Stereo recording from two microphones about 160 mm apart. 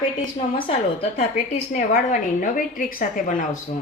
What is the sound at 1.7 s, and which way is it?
A woman's voice, 55° left (ahead or behind).